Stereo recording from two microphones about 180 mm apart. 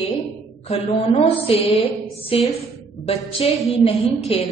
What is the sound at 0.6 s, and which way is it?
A woman's voice, 35° left (ahead or behind).